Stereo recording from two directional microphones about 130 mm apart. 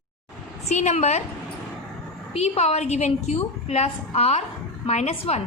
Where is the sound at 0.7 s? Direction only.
60° left (ahead or behind).